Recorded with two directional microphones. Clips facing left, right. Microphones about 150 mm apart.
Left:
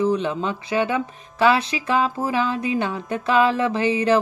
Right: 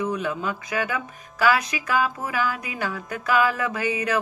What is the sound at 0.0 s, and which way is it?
Speech, 30° left (ahead or behind).